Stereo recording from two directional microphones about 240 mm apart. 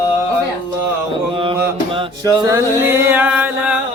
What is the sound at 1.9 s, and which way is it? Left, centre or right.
Music, centre.